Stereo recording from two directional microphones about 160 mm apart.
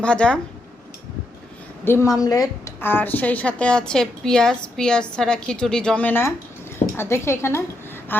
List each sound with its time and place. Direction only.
0.0 s speech: 5° left (ahead or behind)
1.8 s a woman's voice: 15° left (ahead or behind)
2.8 s a woman's voice: 10° left (ahead or behind)